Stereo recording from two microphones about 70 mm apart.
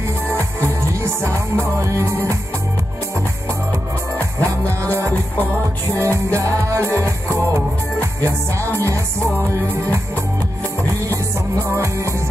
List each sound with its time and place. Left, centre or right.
0.3 s music: right
4.4 s music: right
5.1 s music: left
5.9 s music: right
9.3 s music: left
11.6 s music: right